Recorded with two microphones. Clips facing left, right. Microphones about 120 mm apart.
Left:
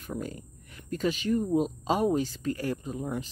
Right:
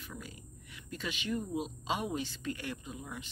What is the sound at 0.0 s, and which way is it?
Speech, 45° left (ahead or behind).